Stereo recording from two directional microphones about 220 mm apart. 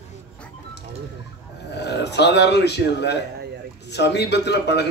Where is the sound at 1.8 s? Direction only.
50° left (ahead or behind).